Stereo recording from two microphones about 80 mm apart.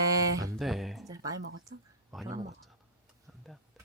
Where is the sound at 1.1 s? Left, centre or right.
Right.